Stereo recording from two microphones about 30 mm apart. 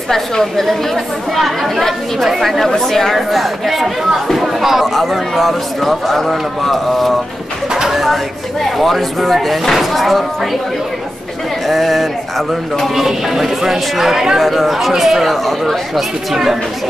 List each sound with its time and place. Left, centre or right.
0.1 s a woman's voice: centre
3.2 s speech: centre
4.8 s speech: centre
7.7 s a sound: centre
8.0 s speech: centre
11.6 s speech: centre
12.8 s speech: centre
14.4 s speech: centre